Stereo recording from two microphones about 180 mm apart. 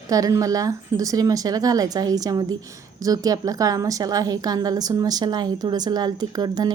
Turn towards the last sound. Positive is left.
turn(degrees=-25)  # may be behind; listen again after turning